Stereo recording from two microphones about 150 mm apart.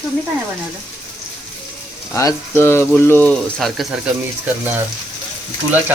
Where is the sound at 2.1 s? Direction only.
20° left (ahead or behind).